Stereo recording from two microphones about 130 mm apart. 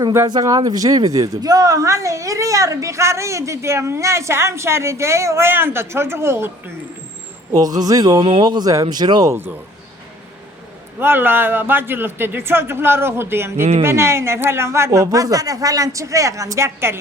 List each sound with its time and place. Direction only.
0.0 s speech: 20° right (ahead or behind)
7.5 s speech: 30° right (ahead or behind)
9.3 s speech: 15° right (ahead or behind)
11.0 s speech: 15° right (ahead or behind)